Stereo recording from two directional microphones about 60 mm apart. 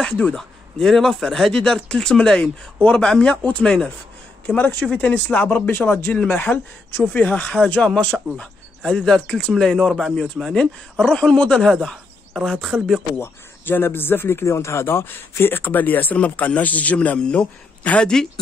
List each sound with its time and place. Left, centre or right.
0.0 s speech: centre
0.4 s speech: centre
4.9 s speech: left
8.8 s speech: centre
12.6 s speech: centre
13.2 s speech: left
14.4 s speech: left; by 18.2 s centre